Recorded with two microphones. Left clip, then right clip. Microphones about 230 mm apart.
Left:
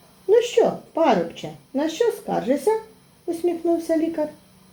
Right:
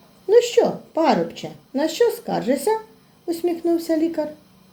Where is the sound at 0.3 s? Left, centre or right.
Right.